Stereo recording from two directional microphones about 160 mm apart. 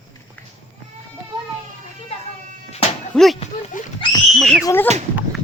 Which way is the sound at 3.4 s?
40° left (ahead or behind).